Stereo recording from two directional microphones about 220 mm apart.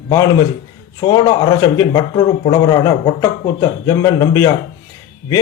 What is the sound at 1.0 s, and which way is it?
A man's voice, 20° left (ahead or behind).